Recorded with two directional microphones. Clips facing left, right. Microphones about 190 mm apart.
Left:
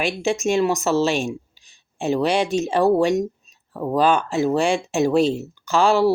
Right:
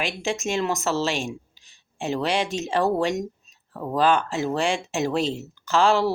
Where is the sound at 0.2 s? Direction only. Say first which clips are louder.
Left 7 dB; 15° left (ahead or behind).